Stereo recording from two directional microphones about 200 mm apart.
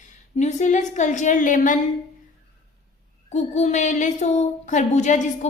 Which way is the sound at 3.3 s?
35° left (ahead or behind).